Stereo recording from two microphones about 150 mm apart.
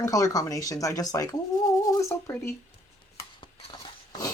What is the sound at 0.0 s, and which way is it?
Speech, 25° left (ahead or behind).